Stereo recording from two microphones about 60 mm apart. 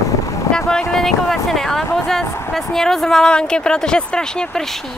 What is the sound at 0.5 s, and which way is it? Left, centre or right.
A woman's voice, centre.